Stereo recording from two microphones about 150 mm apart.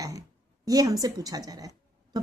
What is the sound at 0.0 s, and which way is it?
A woman's voice, 20° right (ahead or behind).